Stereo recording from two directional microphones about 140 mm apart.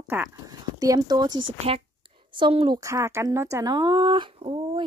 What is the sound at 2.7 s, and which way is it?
Speech, 25° right (ahead or behind).